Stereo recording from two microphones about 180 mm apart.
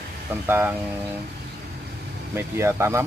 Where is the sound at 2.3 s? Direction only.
15° right (ahead or behind).